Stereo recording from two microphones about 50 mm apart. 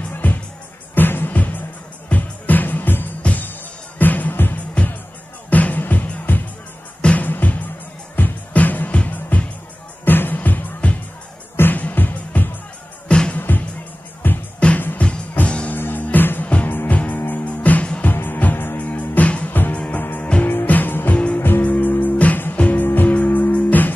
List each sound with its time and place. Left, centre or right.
0.1 s music: left
3.2 s music: left
4.8 s music: left
10.0 s music: left
11.5 s music: left
13.1 s music: centre
13.4 s music: left
14.6 s music: left
15.7 s music: left
18.1 s music: left
18.8 s music: left
20.0 s music: left